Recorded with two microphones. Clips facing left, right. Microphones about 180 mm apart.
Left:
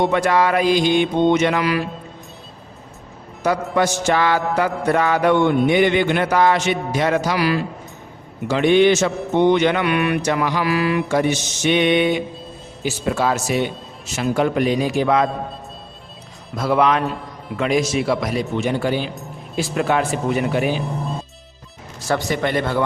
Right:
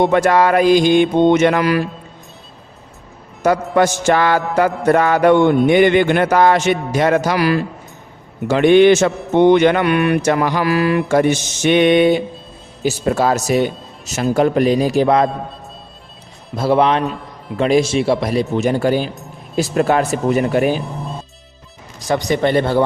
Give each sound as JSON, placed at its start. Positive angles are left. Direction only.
{"t": 0.0, "sound": "a man's voice", "side_deg": -50}
{"t": 3.4, "sound": "a man's voice", "side_deg": -50}
{"t": 16.6, "sound": "a man's voice", "side_deg": -30}
{"t": 22.0, "sound": "speech", "side_deg": -15}
{"t": 22.4, "sound": "speech", "side_deg": -30}